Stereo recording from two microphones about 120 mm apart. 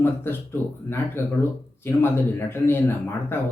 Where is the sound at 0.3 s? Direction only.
20° left (ahead or behind).